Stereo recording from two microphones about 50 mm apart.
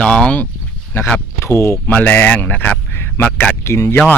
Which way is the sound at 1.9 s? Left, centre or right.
Left.